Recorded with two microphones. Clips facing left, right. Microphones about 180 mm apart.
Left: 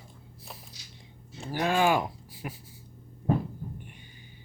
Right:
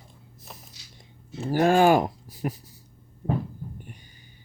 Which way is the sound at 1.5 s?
45° right (ahead or behind).